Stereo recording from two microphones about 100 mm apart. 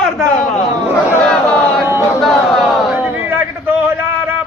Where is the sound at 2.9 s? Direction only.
15° right (ahead or behind).